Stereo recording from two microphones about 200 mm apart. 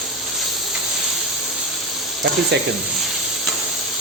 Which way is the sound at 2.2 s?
60° right (ahead or behind).